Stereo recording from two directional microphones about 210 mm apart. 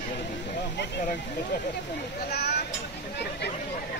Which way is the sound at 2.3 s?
50° left (ahead or behind).